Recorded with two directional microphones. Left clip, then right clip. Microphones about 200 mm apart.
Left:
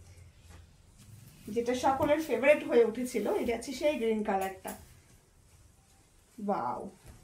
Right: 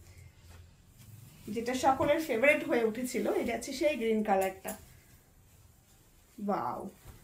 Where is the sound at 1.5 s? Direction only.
20° right (ahead or behind).